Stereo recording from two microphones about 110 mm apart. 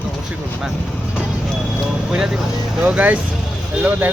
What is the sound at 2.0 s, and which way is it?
Speech, 5° right (ahead or behind).